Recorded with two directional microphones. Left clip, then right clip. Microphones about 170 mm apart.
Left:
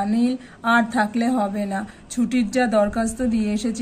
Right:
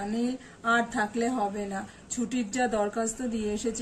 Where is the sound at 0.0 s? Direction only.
40° left (ahead or behind).